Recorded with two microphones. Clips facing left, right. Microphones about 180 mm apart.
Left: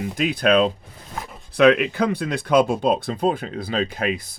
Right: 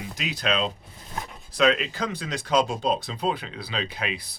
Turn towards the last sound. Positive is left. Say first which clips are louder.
# left 7 dB
turn(degrees=45)  # may be behind; listen again after turning